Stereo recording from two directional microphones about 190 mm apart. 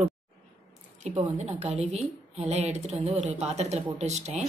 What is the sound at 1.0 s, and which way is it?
A woman's voice, 35° right (ahead or behind).